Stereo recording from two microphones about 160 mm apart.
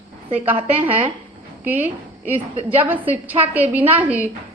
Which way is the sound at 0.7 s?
10° right (ahead or behind).